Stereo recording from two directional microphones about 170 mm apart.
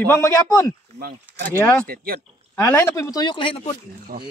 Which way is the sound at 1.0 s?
70° right (ahead or behind).